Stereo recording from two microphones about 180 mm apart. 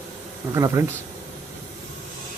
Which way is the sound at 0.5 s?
15° right (ahead or behind).